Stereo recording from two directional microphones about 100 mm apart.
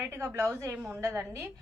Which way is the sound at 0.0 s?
25° right (ahead or behind).